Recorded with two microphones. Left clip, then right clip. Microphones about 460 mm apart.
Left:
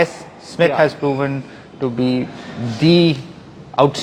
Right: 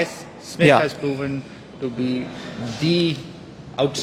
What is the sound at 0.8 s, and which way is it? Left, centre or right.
A man's voice, centre.